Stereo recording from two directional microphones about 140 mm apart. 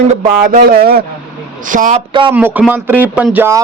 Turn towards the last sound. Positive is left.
turn(degrees=-15)  # may be behind; listen again after turning